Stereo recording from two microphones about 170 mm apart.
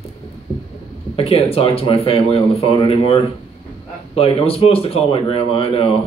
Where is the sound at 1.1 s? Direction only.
35° left (ahead or behind).